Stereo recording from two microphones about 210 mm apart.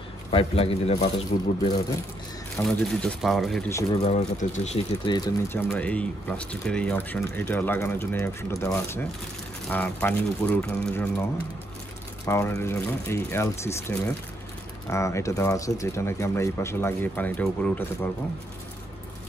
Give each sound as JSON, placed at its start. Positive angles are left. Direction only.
{"t": 0.3, "sound": "a man's voice", "side_deg": 25}
{"t": 2.5, "sound": "speech", "side_deg": 5}
{"t": 4.0, "sound": "speech", "side_deg": 35}
{"t": 5.0, "sound": "speech", "side_deg": 20}
{"t": 12.3, "sound": "speech", "side_deg": 15}